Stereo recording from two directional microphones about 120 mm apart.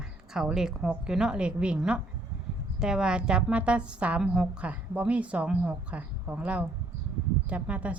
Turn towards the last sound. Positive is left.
turn(degrees=-10)  # may be behind; listen again after turning